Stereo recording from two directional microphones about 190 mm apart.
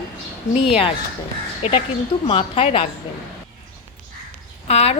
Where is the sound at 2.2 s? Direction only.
30° left (ahead or behind).